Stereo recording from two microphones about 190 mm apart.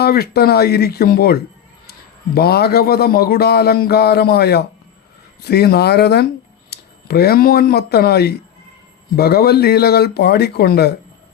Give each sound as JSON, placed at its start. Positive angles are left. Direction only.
{"t": 0.0, "sound": "a man's voice", "side_deg": 55}